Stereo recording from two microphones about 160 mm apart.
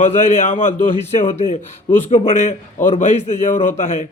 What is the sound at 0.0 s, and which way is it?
Speech, 55° left (ahead or behind).